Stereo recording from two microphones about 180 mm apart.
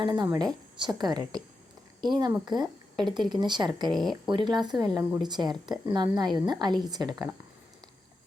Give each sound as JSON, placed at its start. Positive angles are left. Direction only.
{"t": 0.0, "sound": "speech", "side_deg": -20}